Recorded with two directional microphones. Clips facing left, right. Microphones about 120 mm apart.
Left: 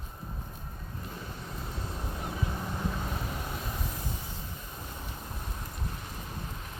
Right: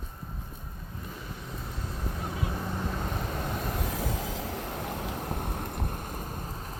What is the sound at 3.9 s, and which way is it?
Vehicle, 90° right.